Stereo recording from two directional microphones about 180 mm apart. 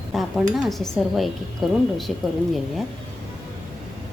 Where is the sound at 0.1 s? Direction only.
Centre (ahead or behind).